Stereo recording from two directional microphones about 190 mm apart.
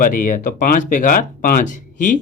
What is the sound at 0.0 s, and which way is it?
Speech, 45° left (ahead or behind).